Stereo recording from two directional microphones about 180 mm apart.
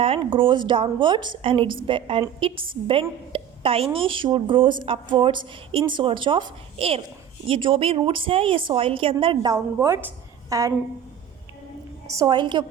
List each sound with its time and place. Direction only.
0.0 s a woman's voice: 30° right (ahead or behind)
12.0 s a woman's voice: 20° right (ahead or behind)